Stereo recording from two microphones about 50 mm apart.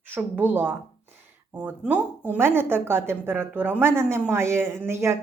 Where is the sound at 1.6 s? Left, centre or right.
Right.